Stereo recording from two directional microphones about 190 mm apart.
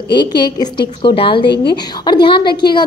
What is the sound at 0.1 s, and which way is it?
Speech, 25° left (ahead or behind).